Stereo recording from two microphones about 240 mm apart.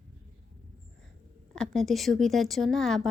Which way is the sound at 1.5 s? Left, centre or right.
Centre.